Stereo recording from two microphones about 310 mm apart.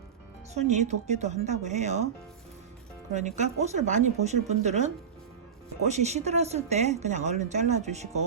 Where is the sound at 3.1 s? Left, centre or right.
Right.